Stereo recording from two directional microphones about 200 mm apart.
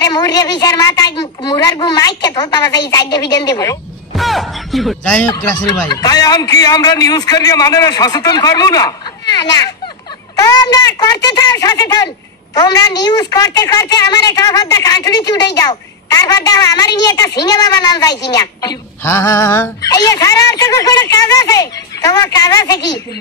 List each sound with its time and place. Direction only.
0.0 s a man's voice: 20° left (ahead or behind)
4.1 s speech: centre (ahead or behind)
5.3 s a man's voice: 15° left (ahead or behind)